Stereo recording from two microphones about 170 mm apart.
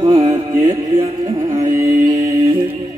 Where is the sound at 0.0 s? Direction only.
35° right (ahead or behind).